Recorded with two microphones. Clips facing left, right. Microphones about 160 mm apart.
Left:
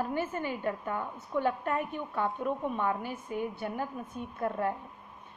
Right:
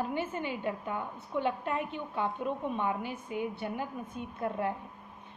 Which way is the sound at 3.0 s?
45° left (ahead or behind).